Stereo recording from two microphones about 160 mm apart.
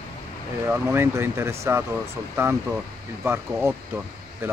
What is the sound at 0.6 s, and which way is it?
Speech, 15° right (ahead or behind).